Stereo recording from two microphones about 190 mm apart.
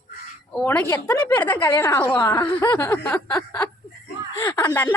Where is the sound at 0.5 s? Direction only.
10° left (ahead or behind).